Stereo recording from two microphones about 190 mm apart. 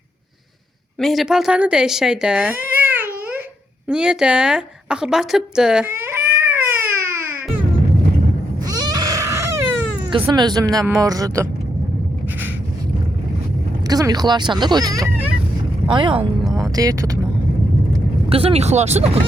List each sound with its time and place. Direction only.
0.9 s speech: centre (ahead or behind)
3.8 s a sound: 5° right (ahead or behind)
8.6 s a sound: 20° right (ahead or behind)
10.2 s speech: 20° right (ahead or behind)
13.8 s speech: 20° right (ahead or behind)
18.3 s speech: 30° right (ahead or behind)